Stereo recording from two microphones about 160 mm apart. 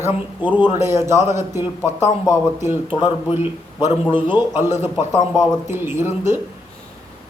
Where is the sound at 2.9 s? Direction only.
30° left (ahead or behind).